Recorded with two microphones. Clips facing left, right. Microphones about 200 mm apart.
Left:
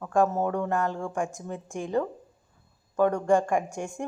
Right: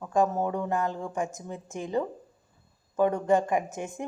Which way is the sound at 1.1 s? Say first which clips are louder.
Left 1 dB; centre (ahead or behind).